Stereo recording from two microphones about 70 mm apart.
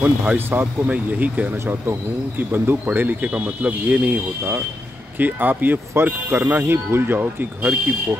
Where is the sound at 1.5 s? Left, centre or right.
Right.